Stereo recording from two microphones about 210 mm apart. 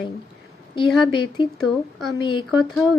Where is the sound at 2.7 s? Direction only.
Centre (ahead or behind).